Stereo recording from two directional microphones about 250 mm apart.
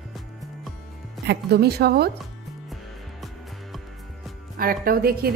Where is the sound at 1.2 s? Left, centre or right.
Right.